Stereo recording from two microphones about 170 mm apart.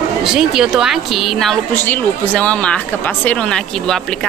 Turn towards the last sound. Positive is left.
turn(degrees=5)  # may be behind; listen again after turning